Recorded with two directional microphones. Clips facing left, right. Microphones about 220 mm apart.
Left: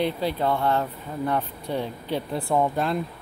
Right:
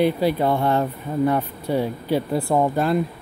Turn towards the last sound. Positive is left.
turn(degrees=-5)  # may be behind; listen again after turning